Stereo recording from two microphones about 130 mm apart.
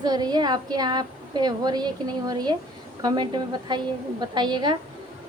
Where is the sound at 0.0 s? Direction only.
30° right (ahead or behind).